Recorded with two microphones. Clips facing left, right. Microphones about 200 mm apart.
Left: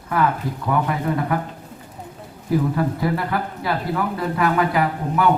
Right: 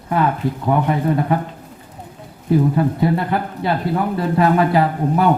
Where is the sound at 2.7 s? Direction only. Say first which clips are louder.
Right 4 dB; 25° right (ahead or behind).